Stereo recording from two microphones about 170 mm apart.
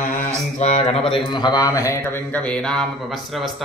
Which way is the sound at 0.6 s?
40° left (ahead or behind).